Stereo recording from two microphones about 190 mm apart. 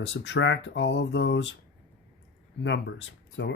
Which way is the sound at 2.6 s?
70° left (ahead or behind).